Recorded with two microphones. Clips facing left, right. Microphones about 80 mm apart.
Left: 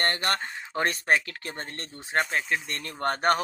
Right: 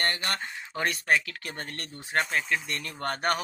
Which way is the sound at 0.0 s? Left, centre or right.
Left.